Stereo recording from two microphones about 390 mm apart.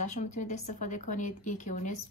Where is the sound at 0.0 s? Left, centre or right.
Centre.